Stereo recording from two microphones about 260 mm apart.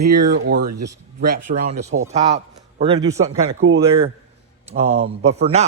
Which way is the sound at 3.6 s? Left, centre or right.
Right.